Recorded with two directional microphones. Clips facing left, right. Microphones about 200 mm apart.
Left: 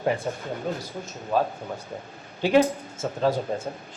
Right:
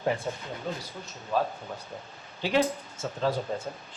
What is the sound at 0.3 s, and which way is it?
Speech, 55° left (ahead or behind).